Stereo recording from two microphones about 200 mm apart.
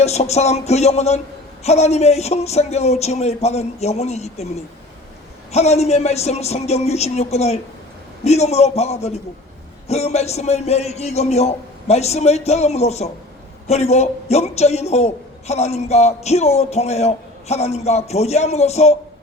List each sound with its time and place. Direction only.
0.0 s a man's voice: 30° left (ahead or behind)